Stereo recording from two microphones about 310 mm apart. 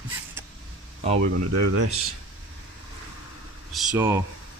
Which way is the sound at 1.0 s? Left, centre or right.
Centre.